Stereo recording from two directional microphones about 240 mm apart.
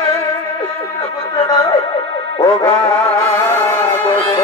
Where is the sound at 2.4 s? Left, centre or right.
Centre.